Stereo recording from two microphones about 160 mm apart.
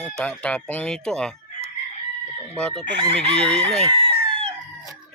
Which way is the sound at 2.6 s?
5° left (ahead or behind).